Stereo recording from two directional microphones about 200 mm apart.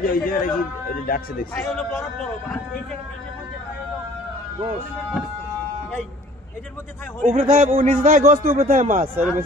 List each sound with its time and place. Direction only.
0.0 s a man's voice: 45° left (ahead or behind)
1.5 s a man's voice: 5° left (ahead or behind)
7.2 s a man's voice: 30° right (ahead or behind)